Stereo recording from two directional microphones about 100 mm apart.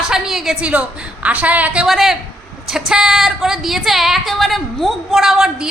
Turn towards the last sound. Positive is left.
turn(degrees=-5)  # may be behind; listen again after turning